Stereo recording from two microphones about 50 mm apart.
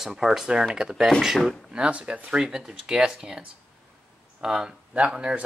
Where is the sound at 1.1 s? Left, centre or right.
Centre.